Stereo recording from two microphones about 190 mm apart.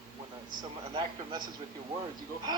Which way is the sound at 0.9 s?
25° right (ahead or behind).